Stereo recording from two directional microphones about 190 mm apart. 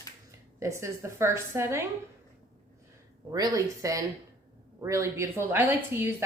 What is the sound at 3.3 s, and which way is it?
Speech, 20° right (ahead or behind).